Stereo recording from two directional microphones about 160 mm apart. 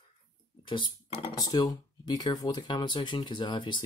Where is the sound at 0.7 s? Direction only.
30° left (ahead or behind).